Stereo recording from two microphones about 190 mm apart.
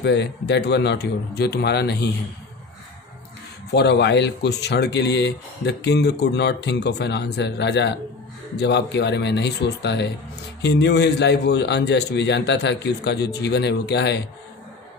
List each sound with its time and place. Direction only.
0.0 s speech: 65° left (ahead or behind)
3.7 s speech: 60° left (ahead or behind)